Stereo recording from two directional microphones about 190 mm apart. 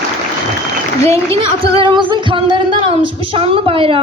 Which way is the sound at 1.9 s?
25° right (ahead or behind).